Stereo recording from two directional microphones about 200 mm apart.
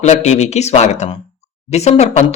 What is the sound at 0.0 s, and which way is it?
Speech, 35° left (ahead or behind).